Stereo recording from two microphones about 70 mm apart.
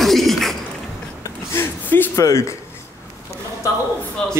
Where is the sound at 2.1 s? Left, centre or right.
Left.